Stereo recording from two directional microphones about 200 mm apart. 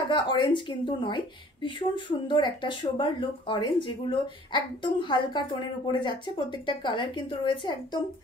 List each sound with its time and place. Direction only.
0.1 s a woman's voice: 25° left (ahead or behind)